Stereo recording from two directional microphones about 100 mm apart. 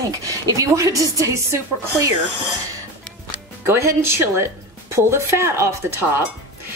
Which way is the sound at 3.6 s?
25° right (ahead or behind).